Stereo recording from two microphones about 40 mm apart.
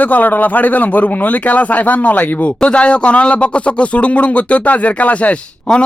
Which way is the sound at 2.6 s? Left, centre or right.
Left.